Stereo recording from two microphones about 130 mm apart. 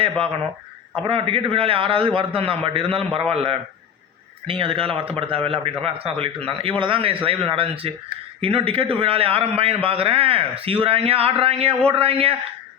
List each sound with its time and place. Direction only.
1.0 s a man's voice: 45° right (ahead or behind)